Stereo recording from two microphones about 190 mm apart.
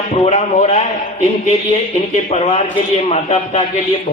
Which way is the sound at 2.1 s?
35° left (ahead or behind).